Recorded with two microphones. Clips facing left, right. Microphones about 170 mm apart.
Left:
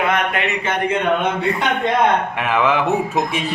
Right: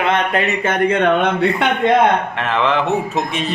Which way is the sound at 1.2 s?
65° right (ahead or behind).